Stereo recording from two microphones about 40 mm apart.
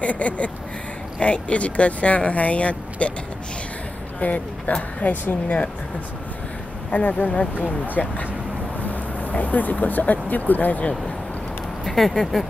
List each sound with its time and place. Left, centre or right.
0.0 s speech: left
4.2 s speech: left
6.9 s speech: left
8.0 s speech: centre
8.8 s speech: left
11.8 s speech: centre